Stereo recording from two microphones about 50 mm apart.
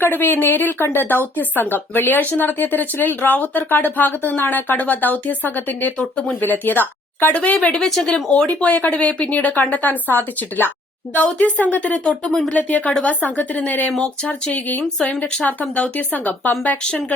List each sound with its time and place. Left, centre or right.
0.0 s a woman's voice: left
7.3 s speech: left
7.8 s speech: centre
8.1 s speech: left
8.4 s speech: left
12.2 s speech: centre
12.5 s speech: left
14.9 s speech: centre